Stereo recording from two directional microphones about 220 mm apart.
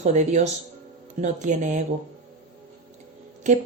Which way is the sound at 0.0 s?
30° right (ahead or behind).